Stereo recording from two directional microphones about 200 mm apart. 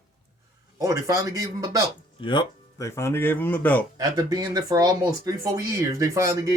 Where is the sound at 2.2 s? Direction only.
20° left (ahead or behind).